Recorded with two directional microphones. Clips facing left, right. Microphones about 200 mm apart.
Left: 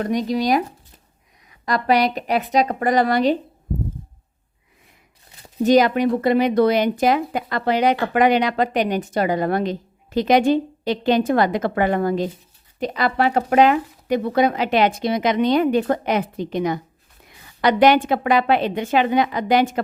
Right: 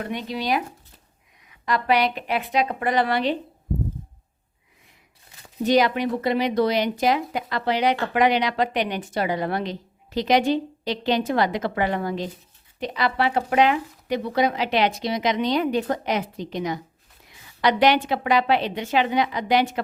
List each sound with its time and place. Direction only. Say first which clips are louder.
0.0 s a woman's voice: left 8 dB; 40° left (ahead or behind)
5.6 s speech: left 5 dB; 45° left (ahead or behind)